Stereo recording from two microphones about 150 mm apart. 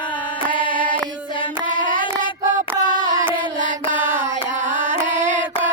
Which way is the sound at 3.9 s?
55° right (ahead or behind).